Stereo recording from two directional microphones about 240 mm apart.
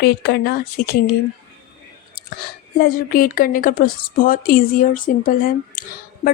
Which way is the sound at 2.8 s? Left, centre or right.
Left.